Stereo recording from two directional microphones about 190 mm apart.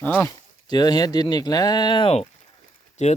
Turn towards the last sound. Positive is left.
turn(degrees=40)  # may be behind; listen again after turning